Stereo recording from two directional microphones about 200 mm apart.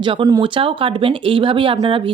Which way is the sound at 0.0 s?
25° right (ahead or behind).